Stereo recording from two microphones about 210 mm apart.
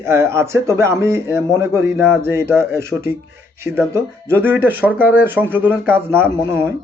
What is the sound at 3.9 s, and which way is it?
Speech, 10° right (ahead or behind).